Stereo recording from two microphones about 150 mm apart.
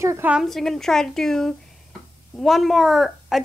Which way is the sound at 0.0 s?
20° right (ahead or behind).